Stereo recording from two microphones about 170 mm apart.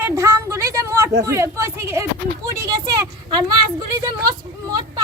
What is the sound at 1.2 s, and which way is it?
A woman's voice, 15° right (ahead or behind).